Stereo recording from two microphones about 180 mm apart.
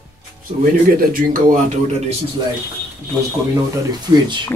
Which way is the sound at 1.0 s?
50° right (ahead or behind).